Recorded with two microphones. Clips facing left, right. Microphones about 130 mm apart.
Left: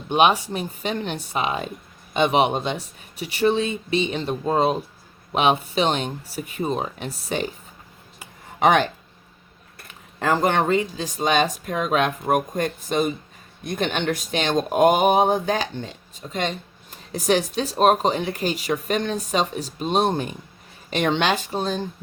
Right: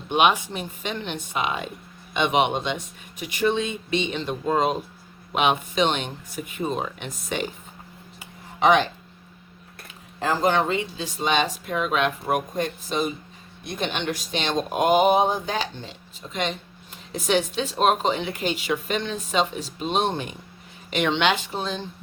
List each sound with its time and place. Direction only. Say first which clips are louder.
0.1 s speech: left 2 dB; 35° left (ahead or behind)
8.5 s speech: left 1 dB; 50° left (ahead or behind)
9.8 s speech: left 3 dB; 60° left (ahead or behind)
16.3 s speech: left 2 dB; 40° left (ahead or behind)